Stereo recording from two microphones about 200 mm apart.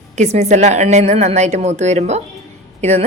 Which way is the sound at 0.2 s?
35° right (ahead or behind).